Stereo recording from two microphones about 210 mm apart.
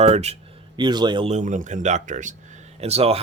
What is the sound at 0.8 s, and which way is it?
Speech, 20° right (ahead or behind).